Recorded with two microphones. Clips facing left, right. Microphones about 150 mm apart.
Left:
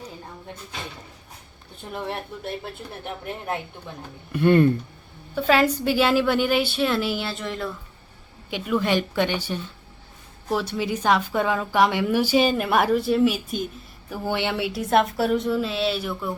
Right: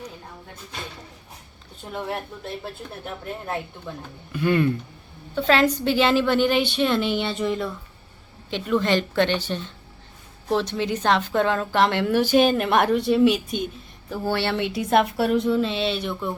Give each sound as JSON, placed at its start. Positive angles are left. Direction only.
{"t": 4.3, "sound": "speech", "side_deg": 55}
{"t": 5.3, "sound": "a woman's voice", "side_deg": 10}
{"t": 14.1, "sound": "a woman's voice", "side_deg": 15}